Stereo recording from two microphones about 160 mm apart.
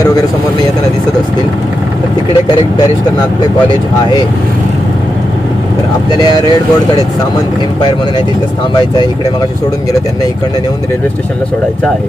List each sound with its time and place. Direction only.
6.1 s speech: 25° left (ahead or behind)